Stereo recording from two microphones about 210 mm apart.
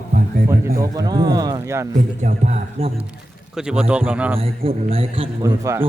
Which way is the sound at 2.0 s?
35° right (ahead or behind).